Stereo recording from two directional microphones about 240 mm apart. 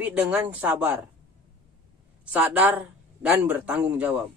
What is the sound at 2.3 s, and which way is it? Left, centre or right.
Speech, centre.